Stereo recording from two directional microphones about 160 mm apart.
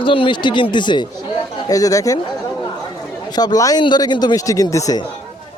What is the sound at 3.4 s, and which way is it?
Speech, 25° left (ahead or behind).